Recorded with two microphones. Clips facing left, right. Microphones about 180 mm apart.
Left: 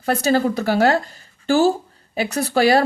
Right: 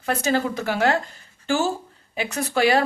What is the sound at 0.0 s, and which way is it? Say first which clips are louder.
Speech: left 5 dB; 35° left (ahead or behind).